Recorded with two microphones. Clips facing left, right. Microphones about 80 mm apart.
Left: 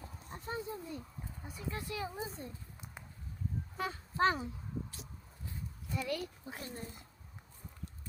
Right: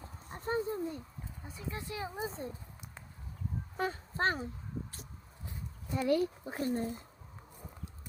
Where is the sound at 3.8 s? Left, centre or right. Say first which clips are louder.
Left 1 dB; right.